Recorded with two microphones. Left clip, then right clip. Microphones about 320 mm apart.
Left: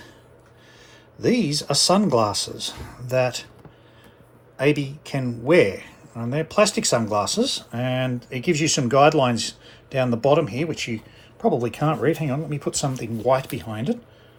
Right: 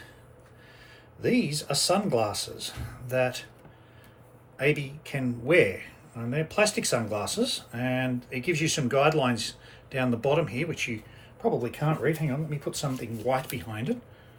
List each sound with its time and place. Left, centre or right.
1.2 s a man's voice: centre
4.5 s a man's voice: centre
12.0 s a man's voice: left